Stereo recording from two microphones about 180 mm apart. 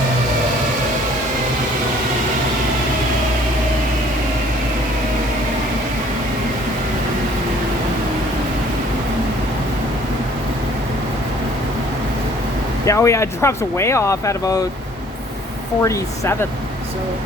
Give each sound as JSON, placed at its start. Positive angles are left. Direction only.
{"t": 12.8, "sound": "speech", "side_deg": 15}
{"t": 15.8, "sound": "speech", "side_deg": 15}